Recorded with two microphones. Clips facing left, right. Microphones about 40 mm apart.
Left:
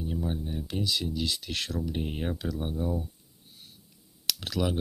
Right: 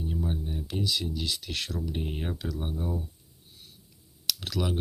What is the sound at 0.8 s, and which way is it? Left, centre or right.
Speech, left.